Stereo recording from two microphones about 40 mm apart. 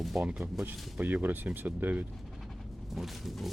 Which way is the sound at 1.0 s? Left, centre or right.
Right.